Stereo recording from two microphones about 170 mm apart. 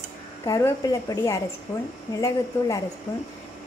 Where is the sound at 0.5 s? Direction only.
20° left (ahead or behind).